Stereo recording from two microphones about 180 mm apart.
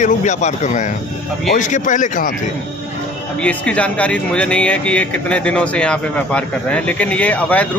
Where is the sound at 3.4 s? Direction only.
5° left (ahead or behind).